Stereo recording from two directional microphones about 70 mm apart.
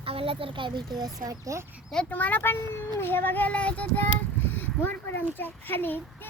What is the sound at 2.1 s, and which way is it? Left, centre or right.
Child singing, left.